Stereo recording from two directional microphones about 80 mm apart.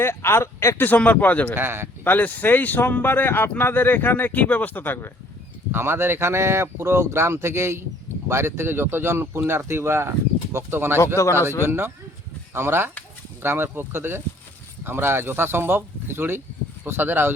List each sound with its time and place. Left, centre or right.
0.0 s speech: left
0.9 s speech: centre
1.5 s speech: right
2.0 s speech: left
5.7 s speech: right
11.2 s speech: left
11.6 s speech: right